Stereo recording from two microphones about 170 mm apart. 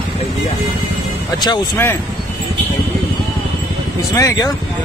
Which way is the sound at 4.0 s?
20° left (ahead or behind).